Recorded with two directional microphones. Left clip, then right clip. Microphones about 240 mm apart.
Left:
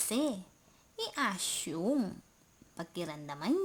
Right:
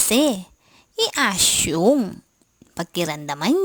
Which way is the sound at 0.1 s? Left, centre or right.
Right.